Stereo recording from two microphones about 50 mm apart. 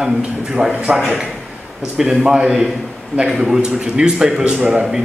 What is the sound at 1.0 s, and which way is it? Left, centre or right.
Speech, centre.